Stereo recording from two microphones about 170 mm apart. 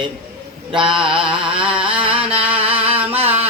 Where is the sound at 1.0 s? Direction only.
30° right (ahead or behind).